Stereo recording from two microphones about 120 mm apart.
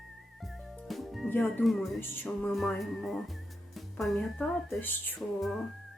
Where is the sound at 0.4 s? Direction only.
Centre (ahead or behind).